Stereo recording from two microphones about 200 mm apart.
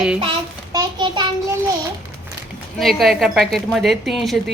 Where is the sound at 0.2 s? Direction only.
20° right (ahead or behind).